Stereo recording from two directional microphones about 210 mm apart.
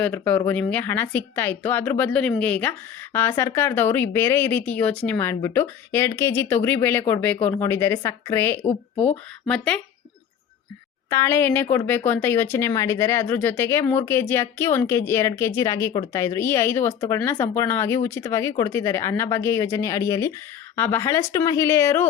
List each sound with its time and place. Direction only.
0.0 s speech: 10° left (ahead or behind)
11.1 s speech: 10° left (ahead or behind)